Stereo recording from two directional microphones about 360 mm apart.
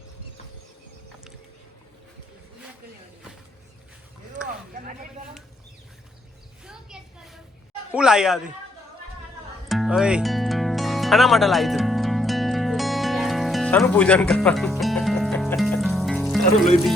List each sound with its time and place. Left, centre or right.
4.4 s a sound: right
7.9 s speech: centre
9.6 s music: centre